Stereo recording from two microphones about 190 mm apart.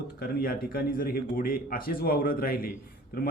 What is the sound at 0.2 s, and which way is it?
A man's voice, 50° left (ahead or behind).